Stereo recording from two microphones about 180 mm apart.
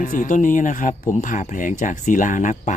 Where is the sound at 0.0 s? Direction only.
45° left (ahead or behind).